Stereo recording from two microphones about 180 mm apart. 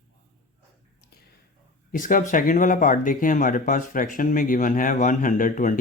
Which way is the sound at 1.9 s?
45° left (ahead or behind).